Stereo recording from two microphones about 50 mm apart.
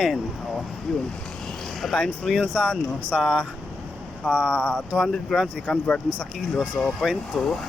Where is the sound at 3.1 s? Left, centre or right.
Centre.